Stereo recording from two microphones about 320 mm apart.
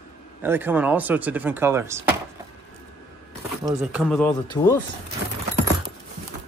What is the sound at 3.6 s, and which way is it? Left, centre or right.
Speech, centre.